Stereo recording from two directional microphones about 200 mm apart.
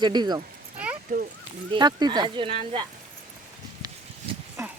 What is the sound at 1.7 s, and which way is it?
Speech, 20° right (ahead or behind).